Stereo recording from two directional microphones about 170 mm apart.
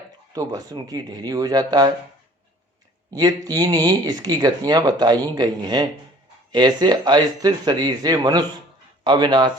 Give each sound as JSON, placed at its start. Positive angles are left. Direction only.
{"t": 0.3, "sound": "speech", "side_deg": -20}
{"t": 3.1, "sound": "speech", "side_deg": -25}